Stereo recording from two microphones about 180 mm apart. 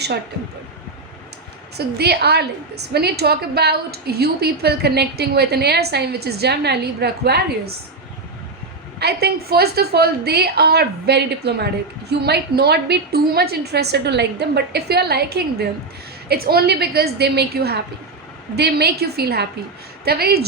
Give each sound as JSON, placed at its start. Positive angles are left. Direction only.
{"t": 2.0, "sound": "a woman's voice", "side_deg": -65}
{"t": 9.0, "sound": "a woman's voice", "side_deg": -65}